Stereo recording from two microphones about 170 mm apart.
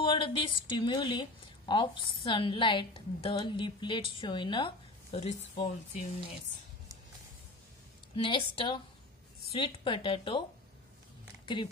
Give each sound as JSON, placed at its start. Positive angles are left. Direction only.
{"t": 0.0, "sound": "a woman's voice", "side_deg": 30}
{"t": 8.2, "sound": "a woman's voice", "side_deg": 30}